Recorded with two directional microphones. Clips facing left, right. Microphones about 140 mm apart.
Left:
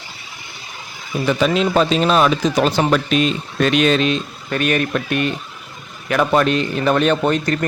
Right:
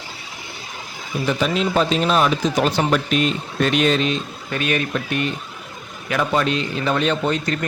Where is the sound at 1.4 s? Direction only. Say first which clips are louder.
Left 4 dB; 90° left.